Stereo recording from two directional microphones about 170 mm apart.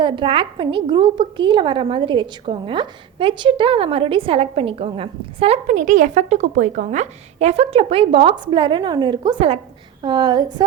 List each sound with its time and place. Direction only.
0.0 s a woman's voice: 30° right (ahead or behind)